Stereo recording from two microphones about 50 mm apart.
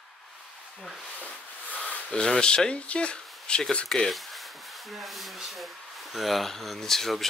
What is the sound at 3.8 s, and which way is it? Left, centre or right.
Speech, centre.